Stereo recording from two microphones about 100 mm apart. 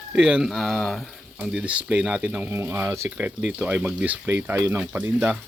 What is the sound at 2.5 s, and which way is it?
Speech, 25° right (ahead or behind).